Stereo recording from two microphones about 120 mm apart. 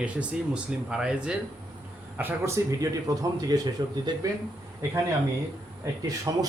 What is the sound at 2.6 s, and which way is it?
Speech, 25° right (ahead or behind).